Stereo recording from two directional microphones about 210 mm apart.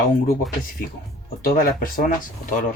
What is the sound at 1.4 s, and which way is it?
Speech, 45° left (ahead or behind).